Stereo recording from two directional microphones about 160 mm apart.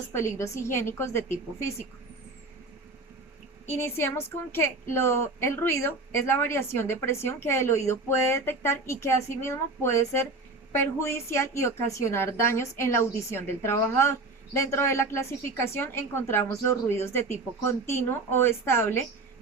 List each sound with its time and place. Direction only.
0.1 s a woman's voice: 15° left (ahead or behind)
3.7 s a woman's voice: 15° left (ahead or behind)